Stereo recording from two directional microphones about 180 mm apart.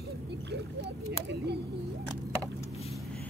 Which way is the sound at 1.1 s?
65° right (ahead or behind).